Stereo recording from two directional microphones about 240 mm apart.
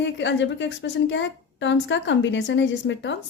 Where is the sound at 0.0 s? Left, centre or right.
Left.